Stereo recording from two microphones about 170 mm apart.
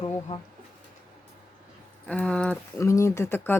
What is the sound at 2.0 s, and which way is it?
Speech, 5° left (ahead or behind).